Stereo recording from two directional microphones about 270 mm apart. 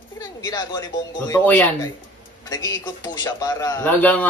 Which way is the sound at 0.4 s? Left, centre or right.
Centre.